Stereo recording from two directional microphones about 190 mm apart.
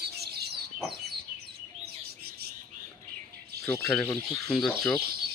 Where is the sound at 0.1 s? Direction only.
55° right (ahead or behind).